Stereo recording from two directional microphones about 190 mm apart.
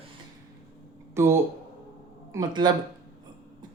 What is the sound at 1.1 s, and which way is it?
Speech, 15° right (ahead or behind).